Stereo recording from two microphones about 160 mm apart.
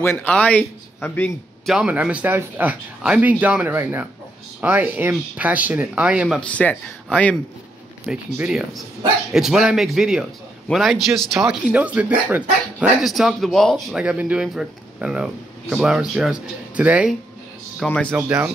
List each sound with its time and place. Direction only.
0.0 s speech: 10° left (ahead or behind)
1.7 s speech: 5° right (ahead or behind)
6.5 s speech: 10° left (ahead or behind)
8.1 s speech: 5° right (ahead or behind)
17.8 s speech: 5° left (ahead or behind)
18.1 s speech: 5° right (ahead or behind)